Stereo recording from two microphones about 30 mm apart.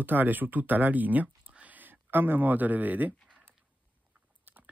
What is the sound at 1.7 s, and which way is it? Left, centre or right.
Speech, right.